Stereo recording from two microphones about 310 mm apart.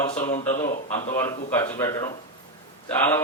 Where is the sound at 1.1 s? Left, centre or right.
Centre.